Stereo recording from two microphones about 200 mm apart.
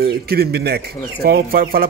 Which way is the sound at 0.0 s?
50° right (ahead or behind).